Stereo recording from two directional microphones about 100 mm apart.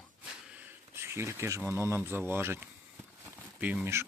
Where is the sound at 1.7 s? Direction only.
25° right (ahead or behind).